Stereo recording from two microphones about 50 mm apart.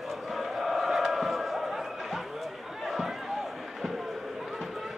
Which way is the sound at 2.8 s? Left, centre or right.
Centre.